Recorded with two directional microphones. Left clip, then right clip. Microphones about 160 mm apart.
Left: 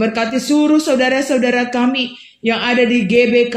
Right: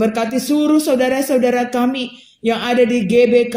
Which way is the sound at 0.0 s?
40° right (ahead or behind).